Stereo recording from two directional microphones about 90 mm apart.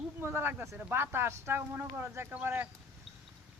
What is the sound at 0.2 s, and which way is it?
Speech, 25° right (ahead or behind).